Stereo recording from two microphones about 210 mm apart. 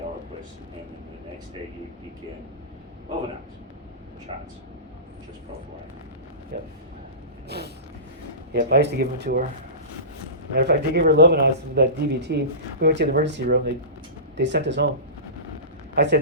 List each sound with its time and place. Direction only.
4.3 s speech: 25° right (ahead or behind)
7.4 s vehicle: 50° right (ahead or behind)
8.5 s speech: 50° right (ahead or behind)
10.5 s speech: 50° right (ahead or behind)
16.0 s speech: 50° right (ahead or behind)